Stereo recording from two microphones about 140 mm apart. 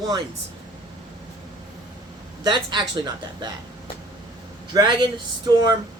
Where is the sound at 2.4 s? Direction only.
35° right (ahead or behind).